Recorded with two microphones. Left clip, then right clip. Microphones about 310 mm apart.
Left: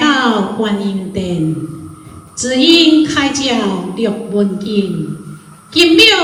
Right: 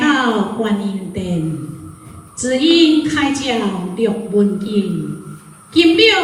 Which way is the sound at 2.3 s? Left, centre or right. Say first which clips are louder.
Left 4 dB; centre.